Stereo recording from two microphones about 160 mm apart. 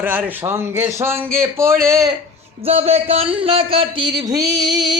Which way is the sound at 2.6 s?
40° right (ahead or behind).